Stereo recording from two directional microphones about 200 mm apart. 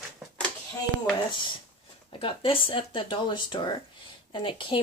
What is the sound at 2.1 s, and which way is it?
Speech, 25° left (ahead or behind).